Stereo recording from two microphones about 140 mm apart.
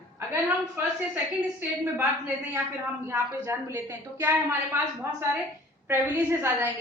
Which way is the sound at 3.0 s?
15° right (ahead or behind).